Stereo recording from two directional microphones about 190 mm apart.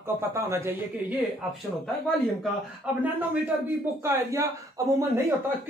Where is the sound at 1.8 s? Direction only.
5° left (ahead or behind); by 4.8 s 15° right (ahead or behind).